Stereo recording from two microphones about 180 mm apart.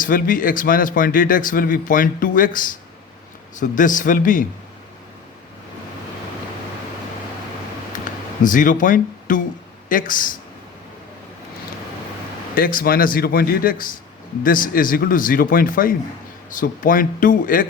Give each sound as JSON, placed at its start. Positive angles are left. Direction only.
{"t": 0.0, "sound": "speech", "side_deg": 50}
{"t": 8.4, "sound": "speech", "side_deg": 45}
{"t": 12.5, "sound": "speech", "side_deg": 55}